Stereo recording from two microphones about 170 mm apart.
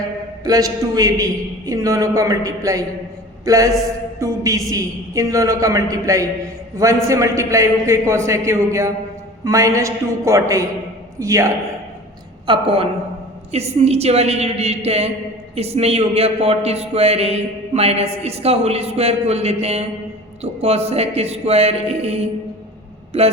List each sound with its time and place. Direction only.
0.4 s a man's voice: 20° right (ahead or behind)
4.2 s a sound: 20° right (ahead or behind)
4.7 s a man's voice: 20° right (ahead or behind)
12.5 s speech: 30° right (ahead or behind)